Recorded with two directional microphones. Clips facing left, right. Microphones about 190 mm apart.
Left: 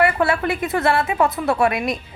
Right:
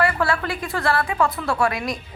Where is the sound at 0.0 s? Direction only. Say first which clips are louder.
Left 3 dB; 20° left (ahead or behind).